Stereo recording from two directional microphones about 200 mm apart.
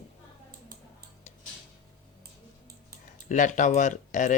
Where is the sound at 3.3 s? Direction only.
40° left (ahead or behind).